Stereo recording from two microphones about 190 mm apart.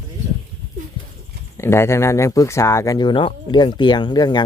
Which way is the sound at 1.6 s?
15° left (ahead or behind).